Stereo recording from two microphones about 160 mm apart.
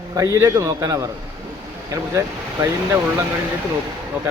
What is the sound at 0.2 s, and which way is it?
Speech, 20° right (ahead or behind).